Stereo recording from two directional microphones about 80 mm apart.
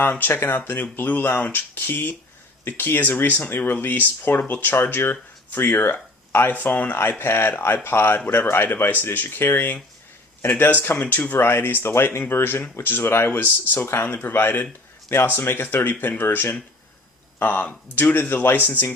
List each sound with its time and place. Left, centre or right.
0.0 s speech: left